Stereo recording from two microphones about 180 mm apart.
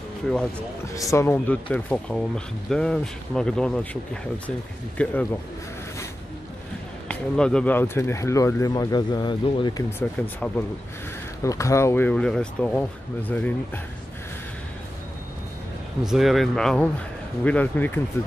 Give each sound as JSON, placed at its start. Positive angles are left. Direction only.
{"t": 1.1, "sound": "speech", "side_deg": 15}
{"t": 7.1, "sound": "speech", "side_deg": 5}
{"t": 9.9, "sound": "speech", "side_deg": 10}
{"t": 16.0, "sound": "speech", "side_deg": 0}